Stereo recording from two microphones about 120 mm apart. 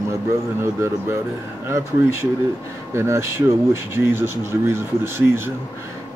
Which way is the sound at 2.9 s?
25° right (ahead or behind).